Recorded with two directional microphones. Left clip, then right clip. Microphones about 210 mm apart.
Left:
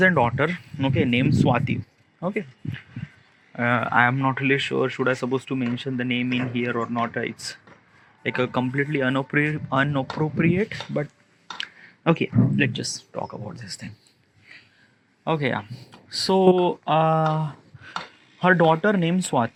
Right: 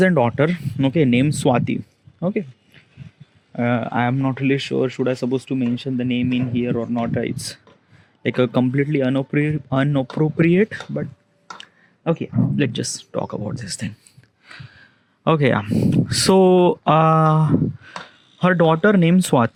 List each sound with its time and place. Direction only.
0.0 s speech: 45° right (ahead or behind)
12.0 s speech: 5° right (ahead or behind)
12.5 s speech: 35° right (ahead or behind)
13.1 s speech: 55° right (ahead or behind)
14.5 s a sound: 45° right (ahead or behind)
16.1 s speech: 50° right (ahead or behind)